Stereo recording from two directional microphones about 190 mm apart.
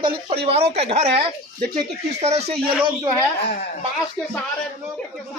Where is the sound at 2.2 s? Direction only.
35° right (ahead or behind).